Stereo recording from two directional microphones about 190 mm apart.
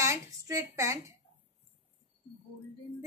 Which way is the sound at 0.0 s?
15° right (ahead or behind).